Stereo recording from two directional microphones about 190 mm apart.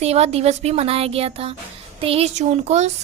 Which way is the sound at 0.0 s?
35° right (ahead or behind).